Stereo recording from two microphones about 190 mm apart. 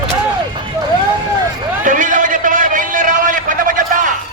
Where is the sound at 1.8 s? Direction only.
45° right (ahead or behind).